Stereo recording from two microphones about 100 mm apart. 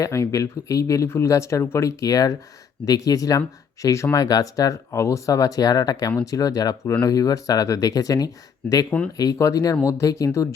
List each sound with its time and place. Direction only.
0.0 s speech: 30° left (ahead or behind)